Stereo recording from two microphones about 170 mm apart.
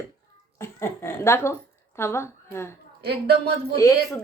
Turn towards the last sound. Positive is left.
turn(degrees=20)  # may be behind; listen again after turning